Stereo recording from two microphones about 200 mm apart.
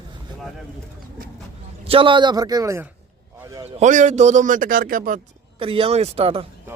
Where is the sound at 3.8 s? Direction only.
35° right (ahead or behind).